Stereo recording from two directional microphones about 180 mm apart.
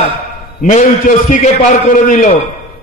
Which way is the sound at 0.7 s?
45° left (ahead or behind).